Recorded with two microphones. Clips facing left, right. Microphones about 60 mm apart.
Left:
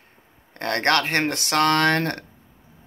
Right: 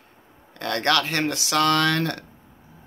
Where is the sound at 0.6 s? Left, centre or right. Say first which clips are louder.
Left 1 dB; left.